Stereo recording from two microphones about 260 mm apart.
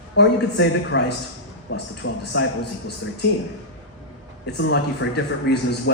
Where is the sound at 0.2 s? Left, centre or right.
Left.